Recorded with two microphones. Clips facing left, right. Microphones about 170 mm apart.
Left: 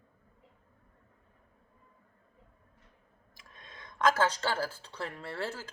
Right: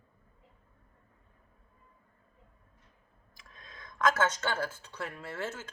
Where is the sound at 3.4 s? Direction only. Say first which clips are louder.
Even; 25° left (ahead or behind).